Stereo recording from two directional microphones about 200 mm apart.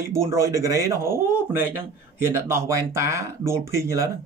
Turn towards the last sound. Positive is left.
turn(degrees=-15)  # may be behind; listen again after turning